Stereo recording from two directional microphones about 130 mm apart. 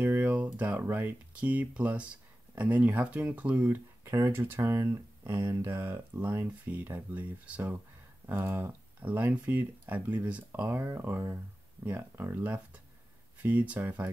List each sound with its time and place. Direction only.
0.0 s speech: 15° right (ahead or behind)